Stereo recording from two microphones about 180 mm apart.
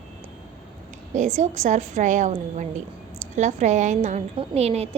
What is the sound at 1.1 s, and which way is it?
A woman's voice, 40° right (ahead or behind).